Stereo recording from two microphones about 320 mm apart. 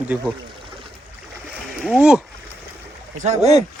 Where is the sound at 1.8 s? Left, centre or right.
Centre.